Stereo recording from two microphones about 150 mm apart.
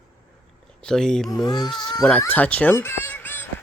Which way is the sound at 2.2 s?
10° left (ahead or behind).